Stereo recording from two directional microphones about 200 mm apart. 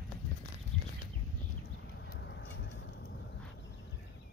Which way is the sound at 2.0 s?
60° left (ahead or behind).